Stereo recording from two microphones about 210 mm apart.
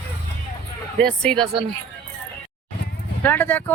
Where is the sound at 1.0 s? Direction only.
5° left (ahead or behind).